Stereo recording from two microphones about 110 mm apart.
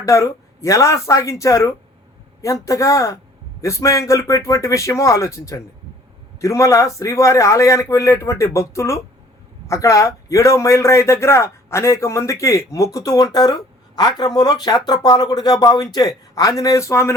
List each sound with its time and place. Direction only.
0.0 s a man's voice: 30° left (ahead or behind)